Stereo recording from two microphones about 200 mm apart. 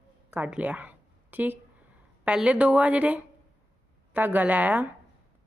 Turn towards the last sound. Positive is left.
turn(degrees=-10)  # may be behind; listen again after turning